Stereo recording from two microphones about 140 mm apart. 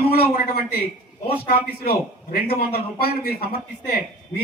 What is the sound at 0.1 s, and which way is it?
Speech, 90° left.